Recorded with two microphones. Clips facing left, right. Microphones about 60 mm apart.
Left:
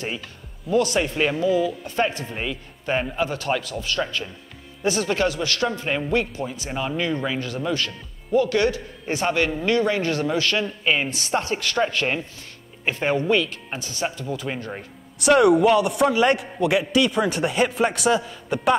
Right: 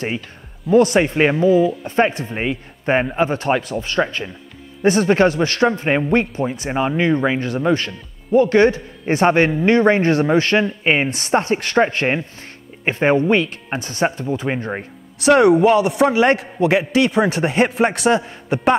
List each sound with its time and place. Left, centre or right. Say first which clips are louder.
0.7 s speech: right 7 dB; right
2.5 s a man's voice: right 8 dB; right
3.0 s speech: right 6 dB; right
11.1 s speech: right 6 dB; right
11.4 s speech: right 6 dB; right
15.6 s speech: right 4 dB; right
16.1 s speech: right 4 dB; right
18.2 s speech: right 4 dB; right